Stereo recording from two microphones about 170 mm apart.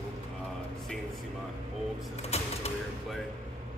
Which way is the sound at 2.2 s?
40° left (ahead or behind).